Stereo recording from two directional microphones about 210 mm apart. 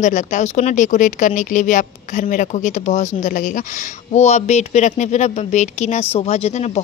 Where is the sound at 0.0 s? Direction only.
35° left (ahead or behind).